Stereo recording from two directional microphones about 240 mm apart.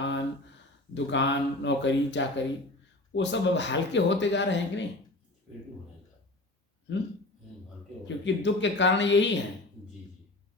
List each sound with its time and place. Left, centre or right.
0.0 s a sound: left
0.9 s speech: left
8.0 s speech: left